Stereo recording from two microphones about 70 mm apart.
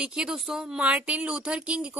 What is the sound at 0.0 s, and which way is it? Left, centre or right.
A woman's voice, centre.